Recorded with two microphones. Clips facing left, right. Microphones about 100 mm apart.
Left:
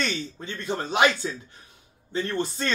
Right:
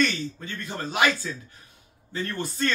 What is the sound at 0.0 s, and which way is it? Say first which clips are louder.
A man's voice: right 4 dB; 25° left (ahead or behind).